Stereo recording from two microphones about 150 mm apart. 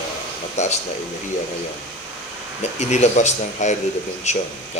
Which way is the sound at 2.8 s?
50° left (ahead or behind).